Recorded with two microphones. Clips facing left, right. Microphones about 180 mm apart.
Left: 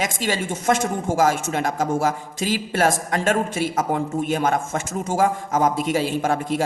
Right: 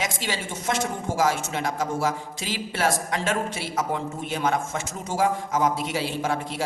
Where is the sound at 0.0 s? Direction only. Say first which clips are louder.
Left 5 dB; 50° left (ahead or behind).